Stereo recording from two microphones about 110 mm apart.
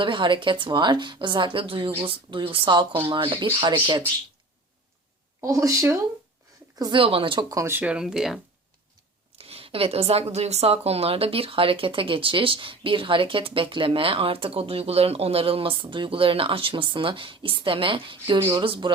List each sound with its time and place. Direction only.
0.0 s a woman's voice: 50° right (ahead or behind)
5.4 s speech: 30° right (ahead or behind)
7.0 s a woman's voice: 55° right (ahead or behind)
7.5 s speech: 25° right (ahead or behind)
7.9 s speech: 5° right (ahead or behind)
9.4 s a woman's voice: 60° right (ahead or behind)
18.3 s speech: 25° right (ahead or behind)
18.6 s a woman's voice: 55° right (ahead or behind)